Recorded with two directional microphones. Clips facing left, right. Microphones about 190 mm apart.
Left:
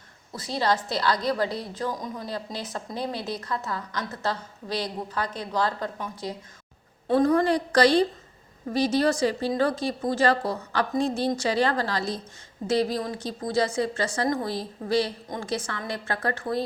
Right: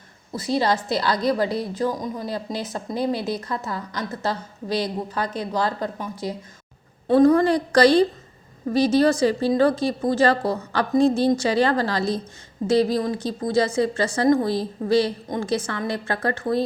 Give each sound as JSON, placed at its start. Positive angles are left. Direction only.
{"t": 0.3, "sound": "a woman's voice", "side_deg": -10}
{"t": 7.1, "sound": "a woman's voice", "side_deg": -35}